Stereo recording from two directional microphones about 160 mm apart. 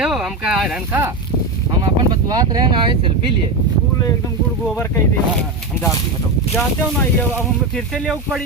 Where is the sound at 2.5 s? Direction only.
30° right (ahead or behind).